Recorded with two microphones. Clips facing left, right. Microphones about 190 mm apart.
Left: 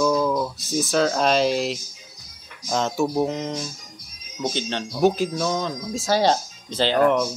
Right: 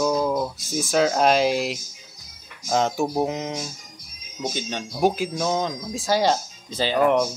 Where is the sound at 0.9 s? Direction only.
10° right (ahead or behind).